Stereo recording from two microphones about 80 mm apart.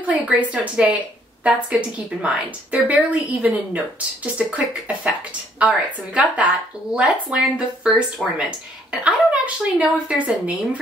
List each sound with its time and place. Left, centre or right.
0.0 s a woman's voice: centre
8.2 s speech: centre
9.0 s a woman's voice: centre